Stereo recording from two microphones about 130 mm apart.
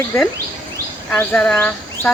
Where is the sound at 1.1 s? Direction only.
10° left (ahead or behind).